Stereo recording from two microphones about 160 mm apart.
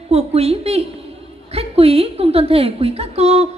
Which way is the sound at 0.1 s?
40° right (ahead or behind).